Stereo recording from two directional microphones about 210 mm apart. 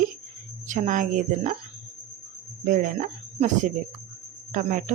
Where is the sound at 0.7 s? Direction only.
35° right (ahead or behind).